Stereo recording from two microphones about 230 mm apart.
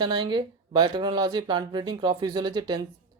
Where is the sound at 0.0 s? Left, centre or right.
Centre.